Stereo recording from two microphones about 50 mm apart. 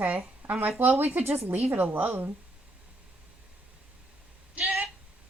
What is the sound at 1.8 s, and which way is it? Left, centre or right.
Speech, right.